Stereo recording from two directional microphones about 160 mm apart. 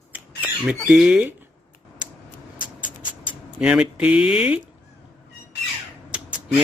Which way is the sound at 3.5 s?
5° right (ahead or behind).